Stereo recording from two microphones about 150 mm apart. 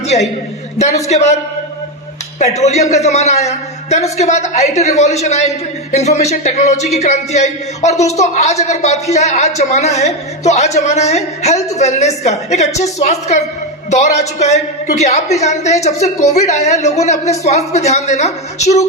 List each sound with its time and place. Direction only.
0.8 s a woman's voice: 50° left (ahead or behind)
2.4 s a woman's voice: 45° left (ahead or behind)